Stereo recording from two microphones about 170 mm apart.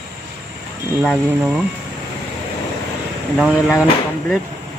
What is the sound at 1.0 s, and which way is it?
Speech, 5° right (ahead or behind).